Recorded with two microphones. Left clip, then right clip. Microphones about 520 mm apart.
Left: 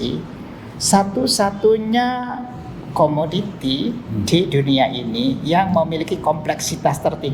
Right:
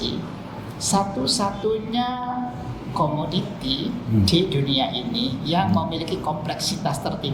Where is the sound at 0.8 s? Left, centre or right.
Left.